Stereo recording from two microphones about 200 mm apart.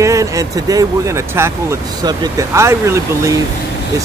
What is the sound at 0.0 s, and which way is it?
Speech, 15° right (ahead or behind).